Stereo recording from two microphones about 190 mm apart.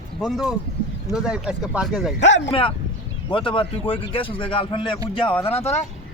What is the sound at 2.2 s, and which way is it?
Speech, 70° left (ahead or behind).